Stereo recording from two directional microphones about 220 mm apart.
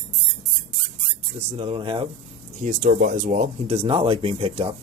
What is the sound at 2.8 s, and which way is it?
Speech, 40° right (ahead or behind).